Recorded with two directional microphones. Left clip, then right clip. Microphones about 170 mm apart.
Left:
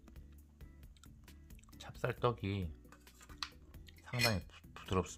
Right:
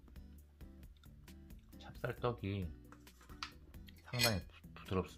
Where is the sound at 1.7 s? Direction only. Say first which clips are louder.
Left 4 dB; 35° left (ahead or behind).